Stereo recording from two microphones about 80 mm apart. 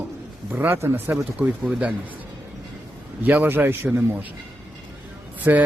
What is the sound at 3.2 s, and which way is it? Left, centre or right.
Speech, right.